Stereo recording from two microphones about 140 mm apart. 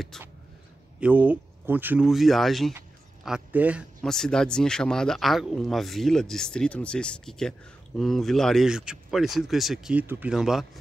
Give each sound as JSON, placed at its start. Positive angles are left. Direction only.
{"t": 0.9, "sound": "speech", "side_deg": -10}
{"t": 2.0, "sound": "a man's voice", "side_deg": 0}
{"t": 4.0, "sound": "speech", "side_deg": 5}